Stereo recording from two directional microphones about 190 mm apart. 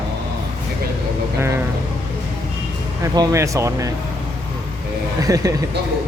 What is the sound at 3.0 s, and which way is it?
Speech, 20° right (ahead or behind).